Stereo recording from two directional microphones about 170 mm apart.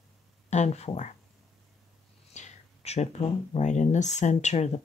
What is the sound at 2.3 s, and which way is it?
Speech, 45° left (ahead or behind).